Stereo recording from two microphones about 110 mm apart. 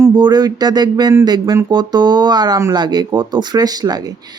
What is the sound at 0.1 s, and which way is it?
Speech, 40° right (ahead or behind).